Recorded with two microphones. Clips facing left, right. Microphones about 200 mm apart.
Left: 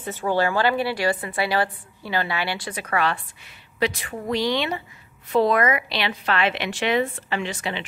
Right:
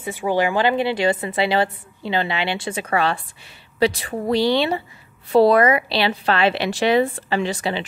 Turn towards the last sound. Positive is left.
turn(degrees=-35)  # may be behind; listen again after turning